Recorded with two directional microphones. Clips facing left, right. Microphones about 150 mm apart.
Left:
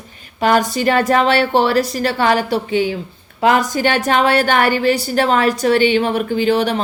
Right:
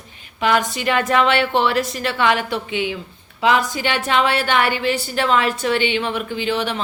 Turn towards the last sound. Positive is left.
turn(degrees=40)  # may be behind; listen again after turning